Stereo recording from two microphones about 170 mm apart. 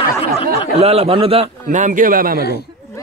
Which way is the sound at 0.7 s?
35° right (ahead or behind).